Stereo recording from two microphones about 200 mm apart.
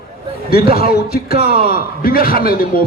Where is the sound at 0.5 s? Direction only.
50° left (ahead or behind).